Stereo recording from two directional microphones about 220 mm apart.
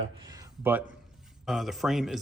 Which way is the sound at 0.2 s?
15° right (ahead or behind).